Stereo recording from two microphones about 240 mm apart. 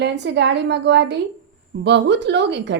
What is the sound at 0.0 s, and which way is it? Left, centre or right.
A woman's voice, right.